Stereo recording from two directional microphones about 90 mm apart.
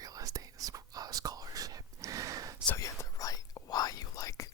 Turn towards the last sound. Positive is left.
turn(degrees=40)  # may be behind; listen again after turning